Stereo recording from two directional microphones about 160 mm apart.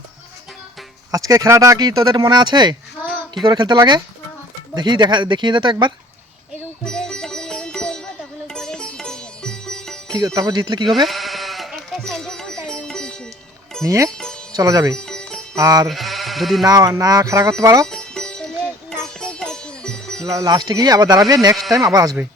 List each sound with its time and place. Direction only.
1.1 s speech: 20° right (ahead or behind)
6.8 s sitar: 5° left (ahead or behind)
10.2 s speech: 25° right (ahead or behind)
11.0 s sheep: centre (ahead or behind)
12.6 s music: 5° left (ahead or behind)
13.8 s speech: 20° right (ahead or behind)
14.9 s sitar: 5° left (ahead or behind)
15.5 s speech: 25° right (ahead or behind)
15.9 s sheep: centre (ahead or behind)
16.6 s speech: 25° right (ahead or behind)
17.8 s music: 5° left (ahead or behind)
20.2 s speech: 20° right (ahead or behind)